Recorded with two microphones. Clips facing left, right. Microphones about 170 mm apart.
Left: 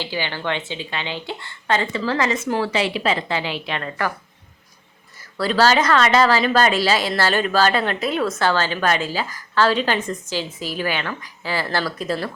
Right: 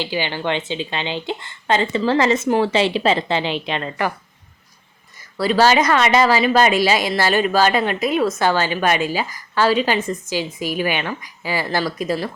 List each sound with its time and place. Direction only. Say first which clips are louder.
0.0 s a woman's voice: right 3 dB; 15° right (ahead or behind)
5.4 s a woman's voice: right 2 dB; 15° right (ahead or behind)